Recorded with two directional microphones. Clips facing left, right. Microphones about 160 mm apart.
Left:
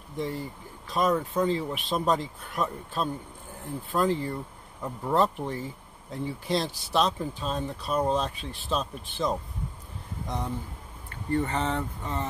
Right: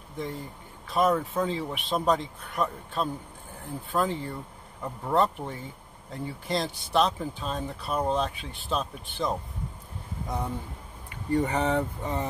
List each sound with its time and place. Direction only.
0.2 s speech: centre (ahead or behind); by 12.3 s 15° right (ahead or behind)